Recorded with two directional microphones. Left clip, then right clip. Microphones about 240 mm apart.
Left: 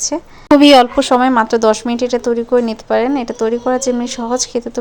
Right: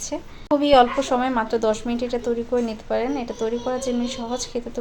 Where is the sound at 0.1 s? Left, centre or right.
Left.